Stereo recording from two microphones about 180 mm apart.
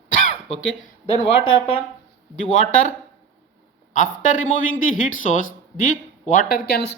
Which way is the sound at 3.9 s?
45° left (ahead or behind).